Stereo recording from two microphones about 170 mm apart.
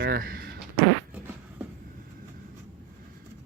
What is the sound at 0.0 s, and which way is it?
Speech, 60° right (ahead or behind).